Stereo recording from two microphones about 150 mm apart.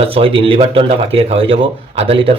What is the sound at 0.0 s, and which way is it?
Speech, 40° right (ahead or behind).